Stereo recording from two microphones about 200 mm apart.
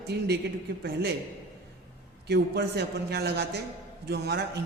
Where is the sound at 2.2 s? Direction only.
55° right (ahead or behind).